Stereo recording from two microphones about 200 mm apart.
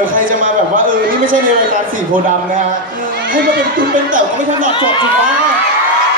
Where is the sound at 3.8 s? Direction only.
45° right (ahead or behind).